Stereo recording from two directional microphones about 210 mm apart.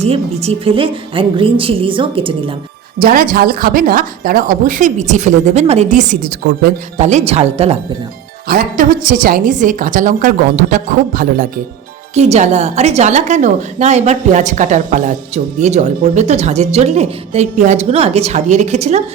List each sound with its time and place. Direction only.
0.0 s speech: 30° right (ahead or behind)
3.0 s speech: 45° right (ahead or behind)
6.9 s speech: 35° right (ahead or behind)
8.4 s speech: 45° right (ahead or behind)